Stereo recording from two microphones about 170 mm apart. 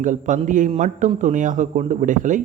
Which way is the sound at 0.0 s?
45° right (ahead or behind).